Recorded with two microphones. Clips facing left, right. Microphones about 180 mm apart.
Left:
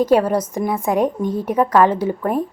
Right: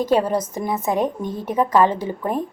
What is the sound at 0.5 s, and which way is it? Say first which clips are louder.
A woman's voice: left 3 dB; 10° left (ahead or behind).